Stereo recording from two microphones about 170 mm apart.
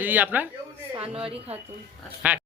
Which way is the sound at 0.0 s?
10° right (ahead or behind).